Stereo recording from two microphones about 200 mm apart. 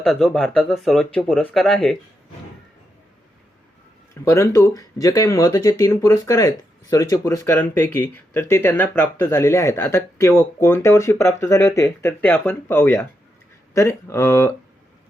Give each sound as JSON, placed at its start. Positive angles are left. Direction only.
{"t": 0.0, "sound": "speech", "side_deg": 0}
{"t": 4.1, "sound": "speech", "side_deg": 15}